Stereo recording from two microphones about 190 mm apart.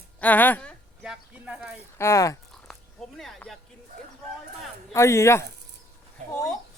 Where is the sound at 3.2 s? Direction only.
Centre (ahead or behind).